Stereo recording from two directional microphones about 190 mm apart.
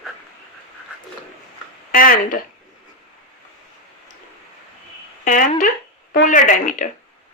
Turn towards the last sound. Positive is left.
turn(degrees=45)  # may be behind; listen again after turning